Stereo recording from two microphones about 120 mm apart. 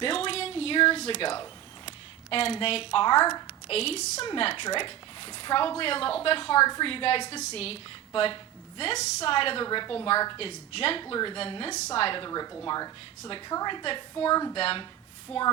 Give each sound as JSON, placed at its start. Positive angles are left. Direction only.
{"t": 0.0, "sound": "a sound", "side_deg": 50}
{"t": 2.3, "sound": "a woman's voice", "side_deg": 50}
{"t": 3.7, "sound": "a woman's voice", "side_deg": 55}
{"t": 4.4, "sound": "a woman's voice", "side_deg": 50}
{"t": 9.6, "sound": "a woman's voice", "side_deg": 35}
{"t": 9.9, "sound": "a woman's voice", "side_deg": 50}
{"t": 11.0, "sound": "a woman's voice", "side_deg": 40}
{"t": 14.5, "sound": "a woman's voice", "side_deg": 50}
{"t": 15.3, "sound": "a sound", "side_deg": 0}